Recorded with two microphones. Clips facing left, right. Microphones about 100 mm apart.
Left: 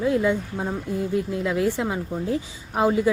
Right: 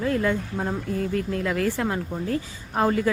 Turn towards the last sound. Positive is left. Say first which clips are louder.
# left 2 dB
turn(degrees=10)  # may be behind; listen again after turning